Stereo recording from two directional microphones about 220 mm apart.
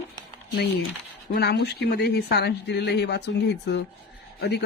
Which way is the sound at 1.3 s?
50° left (ahead or behind).